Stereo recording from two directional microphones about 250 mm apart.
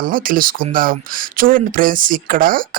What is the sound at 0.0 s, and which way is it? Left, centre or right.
Speech, right.